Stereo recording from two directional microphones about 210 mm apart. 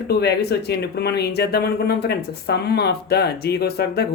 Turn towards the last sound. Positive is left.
turn(degrees=50)  # may be behind; listen again after turning